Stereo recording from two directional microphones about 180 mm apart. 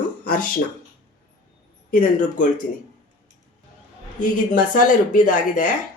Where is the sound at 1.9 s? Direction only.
50° left (ahead or behind).